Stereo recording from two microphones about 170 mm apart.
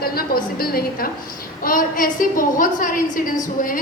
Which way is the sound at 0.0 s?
60° left (ahead or behind).